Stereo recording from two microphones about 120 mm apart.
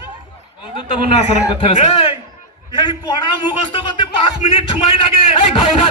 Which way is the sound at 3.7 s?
45° left (ahead or behind).